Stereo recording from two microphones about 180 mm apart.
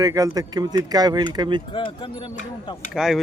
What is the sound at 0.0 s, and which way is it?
Speech, 20° right (ahead or behind).